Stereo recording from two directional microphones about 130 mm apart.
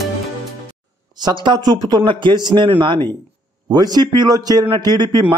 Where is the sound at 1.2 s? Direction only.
35° right (ahead or behind).